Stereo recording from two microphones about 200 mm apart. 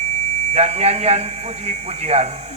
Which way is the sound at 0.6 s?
35° right (ahead or behind).